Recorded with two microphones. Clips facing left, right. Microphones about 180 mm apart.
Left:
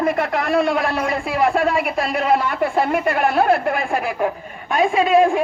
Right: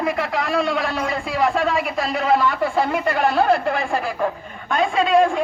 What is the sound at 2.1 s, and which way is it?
Speech, 55° left (ahead or behind).